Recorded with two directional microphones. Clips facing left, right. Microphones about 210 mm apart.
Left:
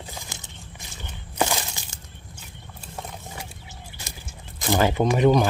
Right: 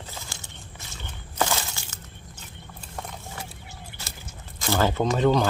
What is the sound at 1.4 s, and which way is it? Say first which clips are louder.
Walk: left 2 dB; 15° left (ahead or behind).